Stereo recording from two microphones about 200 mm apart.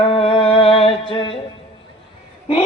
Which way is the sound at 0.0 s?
25° left (ahead or behind).